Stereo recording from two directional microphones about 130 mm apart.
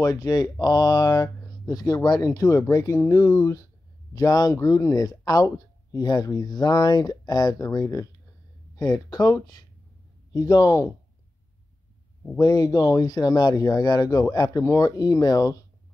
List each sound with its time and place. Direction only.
0.0 s speech: 25° left (ahead or behind)
12.4 s speech: 30° left (ahead or behind)